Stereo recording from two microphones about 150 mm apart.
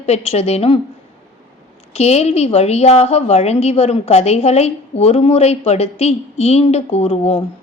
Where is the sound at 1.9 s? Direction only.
45° left (ahead or behind).